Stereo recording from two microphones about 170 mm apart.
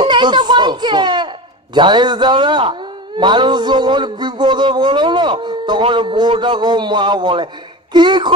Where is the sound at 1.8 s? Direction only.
25° right (ahead or behind).